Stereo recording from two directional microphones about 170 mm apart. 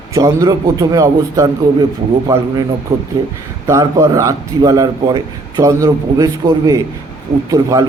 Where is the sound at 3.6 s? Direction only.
20° right (ahead or behind).